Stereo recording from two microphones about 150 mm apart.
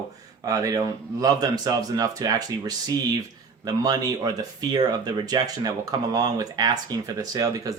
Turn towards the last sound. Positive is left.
turn(degrees=-25)  # may be behind; listen again after turning